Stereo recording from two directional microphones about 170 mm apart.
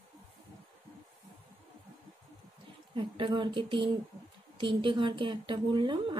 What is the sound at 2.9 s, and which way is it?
A woman's voice, 30° right (ahead or behind).